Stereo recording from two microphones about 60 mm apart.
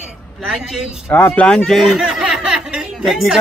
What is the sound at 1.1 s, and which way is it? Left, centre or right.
Speech, left.